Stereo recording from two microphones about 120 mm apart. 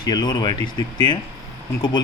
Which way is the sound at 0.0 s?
35° left (ahead or behind).